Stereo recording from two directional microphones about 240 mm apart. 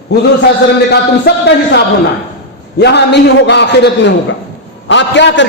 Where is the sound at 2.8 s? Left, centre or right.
Left.